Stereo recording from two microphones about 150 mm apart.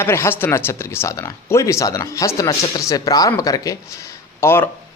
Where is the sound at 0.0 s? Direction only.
15° left (ahead or behind).